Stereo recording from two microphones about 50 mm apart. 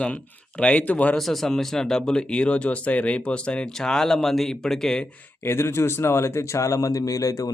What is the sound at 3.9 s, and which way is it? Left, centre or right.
Speech, centre.